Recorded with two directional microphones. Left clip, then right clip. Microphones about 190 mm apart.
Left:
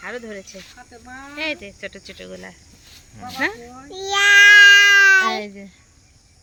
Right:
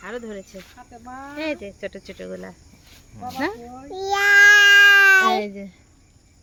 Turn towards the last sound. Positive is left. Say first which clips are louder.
# right 3 dB
turn(degrees=-55)  # may be behind; listen again after turning